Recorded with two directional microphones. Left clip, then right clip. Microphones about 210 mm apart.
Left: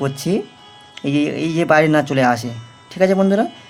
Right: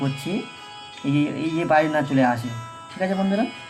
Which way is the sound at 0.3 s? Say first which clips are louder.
Left 8 dB; 45° left (ahead or behind).